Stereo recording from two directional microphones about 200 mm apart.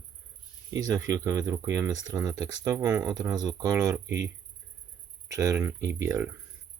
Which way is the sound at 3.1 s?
20° right (ahead or behind).